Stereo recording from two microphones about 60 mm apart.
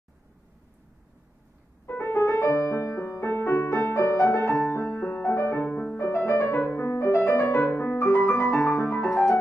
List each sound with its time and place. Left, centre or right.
2.0 s music: left
5.6 s music: left
5.9 s music: left
7.6 s music: left
8.7 s music: left